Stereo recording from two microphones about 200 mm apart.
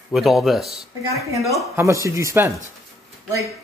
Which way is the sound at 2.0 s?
15° right (ahead or behind).